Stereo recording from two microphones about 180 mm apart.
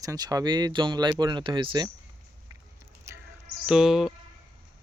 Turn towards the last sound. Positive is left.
turn(degrees=0)  # may be behind; listen again after turning